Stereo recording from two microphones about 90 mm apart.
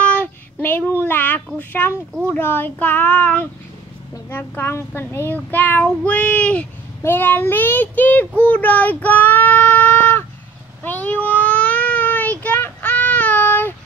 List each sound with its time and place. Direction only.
0.0 s child singing: 15° left (ahead or behind)
2.2 s a child's voice: 25° left (ahead or behind)
10.8 s a sound: 20° left (ahead or behind)